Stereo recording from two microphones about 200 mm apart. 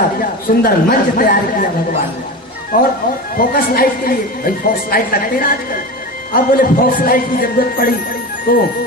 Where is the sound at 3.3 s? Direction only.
45° left (ahead or behind).